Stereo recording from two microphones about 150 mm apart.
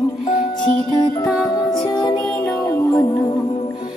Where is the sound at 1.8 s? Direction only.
25° left (ahead or behind).